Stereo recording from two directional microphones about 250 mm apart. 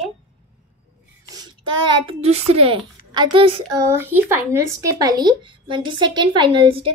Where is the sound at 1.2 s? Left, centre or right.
Centre.